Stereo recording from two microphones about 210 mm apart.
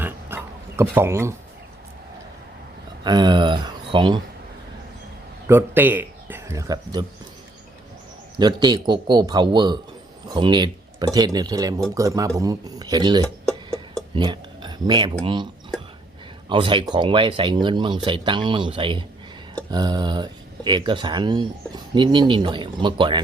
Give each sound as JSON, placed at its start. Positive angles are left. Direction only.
{"t": 0.0, "sound": "pig", "side_deg": -10}
{"t": 3.0, "sound": "speech", "side_deg": -20}
{"t": 5.5, "sound": "speech", "side_deg": -10}
{"t": 8.4, "sound": "speech", "side_deg": -20}
{"t": 16.5, "sound": "speech", "side_deg": -25}